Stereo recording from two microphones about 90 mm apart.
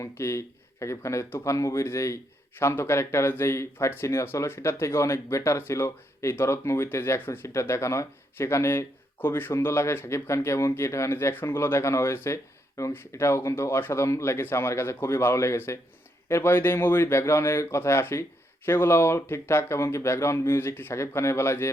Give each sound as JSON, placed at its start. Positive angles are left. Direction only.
{"t": 0.0, "sound": "speech", "side_deg": 30}